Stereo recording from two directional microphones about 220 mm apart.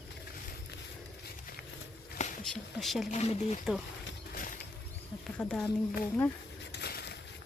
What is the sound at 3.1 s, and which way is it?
Speech, 30° left (ahead or behind).